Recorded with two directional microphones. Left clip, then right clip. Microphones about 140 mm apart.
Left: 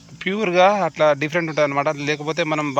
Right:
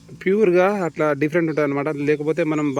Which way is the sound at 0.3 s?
25° right (ahead or behind).